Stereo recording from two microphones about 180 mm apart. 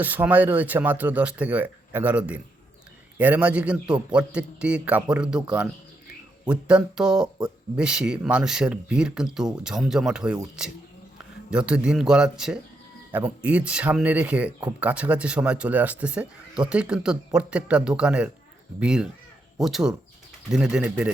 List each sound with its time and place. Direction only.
0.0 s speech: 10° right (ahead or behind)